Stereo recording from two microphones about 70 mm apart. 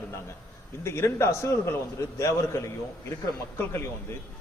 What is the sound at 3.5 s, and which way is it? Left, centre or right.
Speech, left.